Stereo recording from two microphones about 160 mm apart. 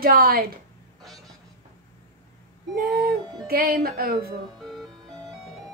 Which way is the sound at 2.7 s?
70° right (ahead or behind).